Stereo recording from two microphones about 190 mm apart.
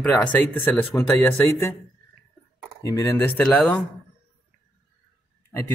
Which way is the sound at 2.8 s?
15° left (ahead or behind).